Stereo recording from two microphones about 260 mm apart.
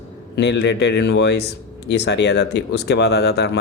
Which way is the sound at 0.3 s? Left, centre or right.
Left.